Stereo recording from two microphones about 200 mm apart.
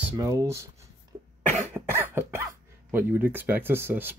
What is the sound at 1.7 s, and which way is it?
Cough, 10° right (ahead or behind).